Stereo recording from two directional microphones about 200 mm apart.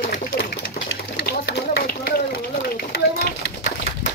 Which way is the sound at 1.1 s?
60° left (ahead or behind).